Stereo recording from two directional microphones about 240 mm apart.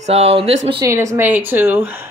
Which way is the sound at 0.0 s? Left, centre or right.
Right.